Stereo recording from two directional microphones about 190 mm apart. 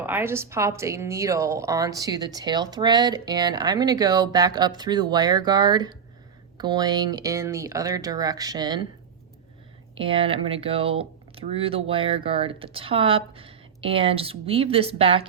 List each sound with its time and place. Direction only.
0.0 s a woman's voice: 10° right (ahead or behind)
10.0 s a woman's voice: 30° right (ahead or behind)